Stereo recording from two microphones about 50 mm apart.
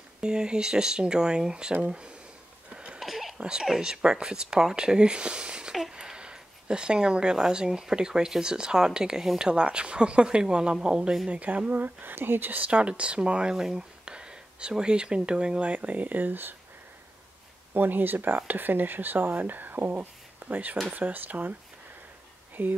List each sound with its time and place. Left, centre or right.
0.2 s speech: centre
2.7 s cough: centre
3.0 s a sound: centre
3.3 s speech: centre
11.2 s speech: right
17.7 s speech: right
22.6 s speech: right